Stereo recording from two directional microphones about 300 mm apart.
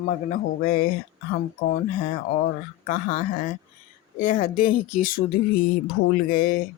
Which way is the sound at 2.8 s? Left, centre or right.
Left.